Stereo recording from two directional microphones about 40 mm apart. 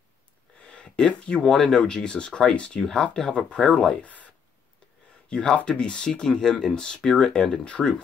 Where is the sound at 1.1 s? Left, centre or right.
Centre.